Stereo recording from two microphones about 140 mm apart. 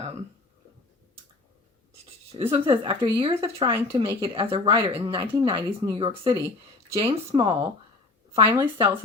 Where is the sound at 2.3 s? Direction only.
35° right (ahead or behind).